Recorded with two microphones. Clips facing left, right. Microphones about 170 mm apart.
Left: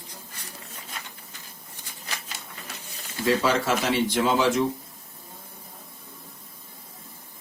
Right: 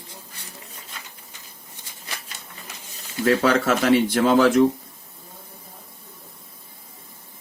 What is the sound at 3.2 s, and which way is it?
Speech, 55° right (ahead or behind).